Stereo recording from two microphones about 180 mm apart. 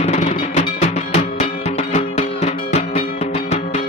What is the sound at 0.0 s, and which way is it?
Music, 35° left (ahead or behind).